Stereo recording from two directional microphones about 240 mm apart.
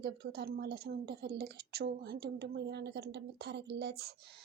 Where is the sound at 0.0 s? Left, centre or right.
Right.